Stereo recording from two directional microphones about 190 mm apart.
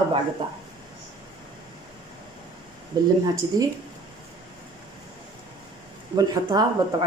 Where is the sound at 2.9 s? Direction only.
20° right (ahead or behind).